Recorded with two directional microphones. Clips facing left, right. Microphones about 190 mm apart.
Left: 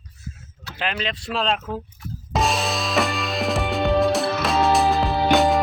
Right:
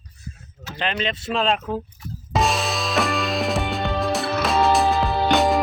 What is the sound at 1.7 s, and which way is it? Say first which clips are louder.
Music: right 2 dB; centre (ahead or behind).